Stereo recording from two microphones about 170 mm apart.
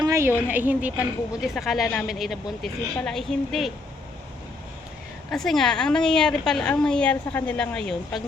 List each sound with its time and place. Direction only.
0.0 s a sound: 15° right (ahead or behind)
0.4 s a woman's voice: 10° right (ahead or behind)
5.3 s a woman's voice: centre (ahead or behind)